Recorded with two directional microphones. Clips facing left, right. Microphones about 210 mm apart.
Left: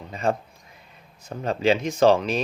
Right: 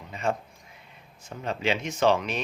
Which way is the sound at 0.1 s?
35° left (ahead or behind).